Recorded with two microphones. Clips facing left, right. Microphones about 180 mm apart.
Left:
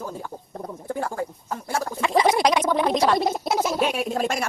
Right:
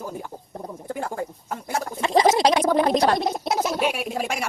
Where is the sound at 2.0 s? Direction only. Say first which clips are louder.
Right 2 dB; 30° right (ahead or behind).